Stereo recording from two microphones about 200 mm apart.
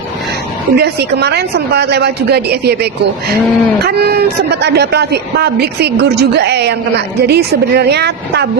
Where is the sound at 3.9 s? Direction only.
55° right (ahead or behind).